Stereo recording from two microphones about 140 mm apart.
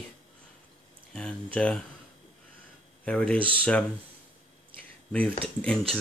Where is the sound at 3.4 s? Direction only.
40° right (ahead or behind).